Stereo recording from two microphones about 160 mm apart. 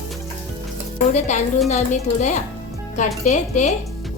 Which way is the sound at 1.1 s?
45° left (ahead or behind).